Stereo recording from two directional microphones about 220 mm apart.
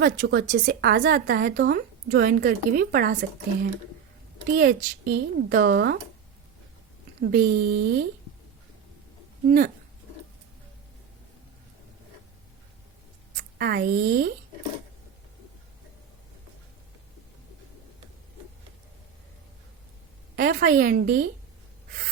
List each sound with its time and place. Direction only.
0.0 s a woman's voice: 45° right (ahead or behind)
4.4 s a woman's voice: 45° right (ahead or behind)
7.2 s a woman's voice: 45° right (ahead or behind)
9.5 s a woman's voice: 40° right (ahead or behind)
13.3 s a woman's voice: 45° right (ahead or behind)
20.3 s a woman's voice: 45° right (ahead or behind)